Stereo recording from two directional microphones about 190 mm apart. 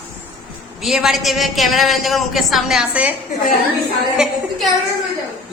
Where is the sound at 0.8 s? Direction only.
Centre (ahead or behind).